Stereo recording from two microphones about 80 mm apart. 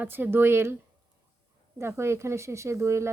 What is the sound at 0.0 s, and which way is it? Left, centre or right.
Speech, right.